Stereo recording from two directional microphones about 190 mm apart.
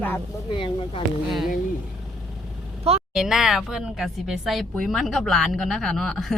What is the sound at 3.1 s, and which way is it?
Speech, centre (ahead or behind).